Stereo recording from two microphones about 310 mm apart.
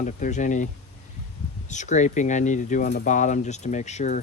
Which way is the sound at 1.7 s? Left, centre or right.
Left.